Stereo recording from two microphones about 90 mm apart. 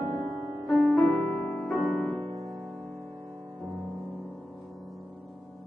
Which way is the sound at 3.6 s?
15° right (ahead or behind).